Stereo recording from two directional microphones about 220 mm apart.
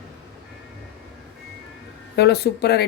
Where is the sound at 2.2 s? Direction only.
50° left (ahead or behind).